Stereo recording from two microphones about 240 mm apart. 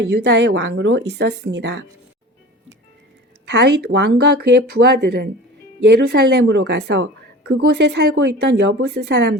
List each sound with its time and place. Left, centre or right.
0.0 s a woman's voice: right
3.4 s a woman's voice: right